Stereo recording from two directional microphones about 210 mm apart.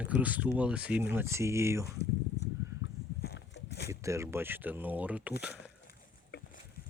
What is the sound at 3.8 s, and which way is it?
Speech, 15° right (ahead or behind).